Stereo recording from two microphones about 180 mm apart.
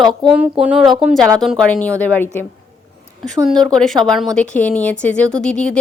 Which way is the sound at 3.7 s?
5° left (ahead or behind).